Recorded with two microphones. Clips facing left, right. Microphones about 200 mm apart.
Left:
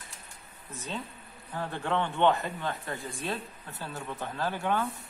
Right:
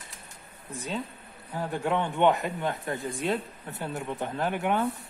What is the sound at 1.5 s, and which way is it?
Speech, 10° right (ahead or behind).